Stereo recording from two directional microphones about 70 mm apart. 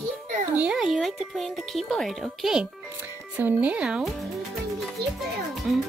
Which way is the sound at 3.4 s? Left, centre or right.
Right.